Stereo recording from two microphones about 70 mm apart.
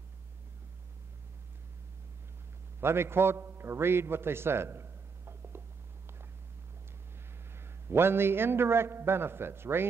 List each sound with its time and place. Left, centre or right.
2.8 s a man's voice: right
7.5 s a man's voice: right